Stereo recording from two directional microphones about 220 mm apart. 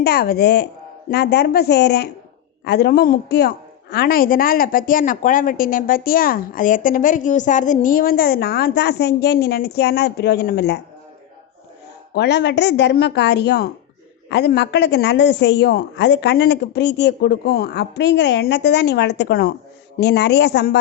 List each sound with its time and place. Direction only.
0.0 s a man's voice: 45° left (ahead or behind)
12.1 s a man's voice: 50° left (ahead or behind)